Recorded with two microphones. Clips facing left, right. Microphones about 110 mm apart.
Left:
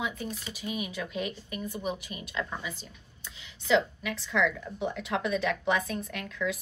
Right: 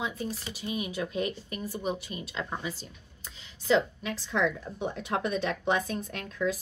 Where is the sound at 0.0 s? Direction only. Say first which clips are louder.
Right 1 dB; 35° right (ahead or behind).